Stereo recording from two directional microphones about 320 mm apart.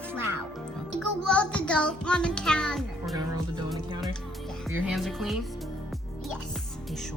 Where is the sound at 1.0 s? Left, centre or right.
Centre.